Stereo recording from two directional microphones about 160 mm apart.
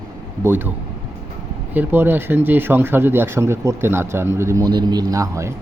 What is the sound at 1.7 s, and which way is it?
Speech, 10° right (ahead or behind).